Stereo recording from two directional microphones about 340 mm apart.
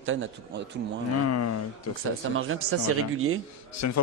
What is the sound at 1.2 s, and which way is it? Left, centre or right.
Speech, left.